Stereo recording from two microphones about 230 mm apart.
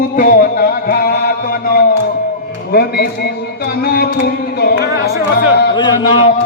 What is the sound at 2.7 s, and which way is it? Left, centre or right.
Speech, left.